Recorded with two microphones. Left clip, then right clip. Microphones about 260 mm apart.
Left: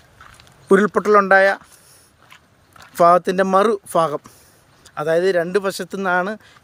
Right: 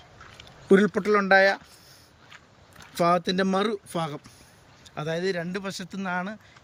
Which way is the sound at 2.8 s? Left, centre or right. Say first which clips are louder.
Left 10 dB; centre.